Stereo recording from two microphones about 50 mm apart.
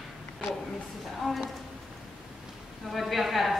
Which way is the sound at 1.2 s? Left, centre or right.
Centre.